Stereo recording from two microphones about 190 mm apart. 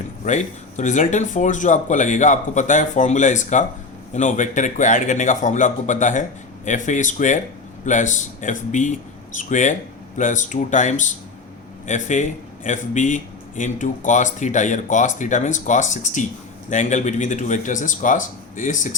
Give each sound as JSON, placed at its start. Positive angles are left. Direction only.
{"t": 0.3, "sound": "a man's voice", "side_deg": 40}